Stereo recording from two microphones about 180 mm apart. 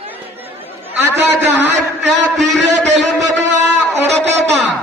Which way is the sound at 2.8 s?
40° right (ahead or behind).